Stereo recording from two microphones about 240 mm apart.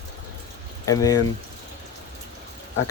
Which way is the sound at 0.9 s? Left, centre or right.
Centre.